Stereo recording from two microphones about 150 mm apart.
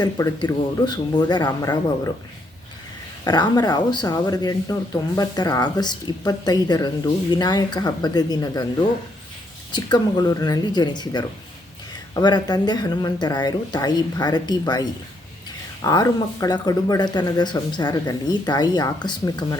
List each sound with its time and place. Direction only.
0.0 s speech: 25° left (ahead or behind)
3.2 s speech: 25° left (ahead or behind)
9.7 s speech: 30° left (ahead or behind)